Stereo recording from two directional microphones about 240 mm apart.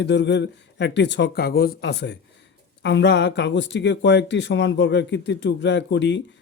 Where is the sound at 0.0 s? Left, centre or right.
Left.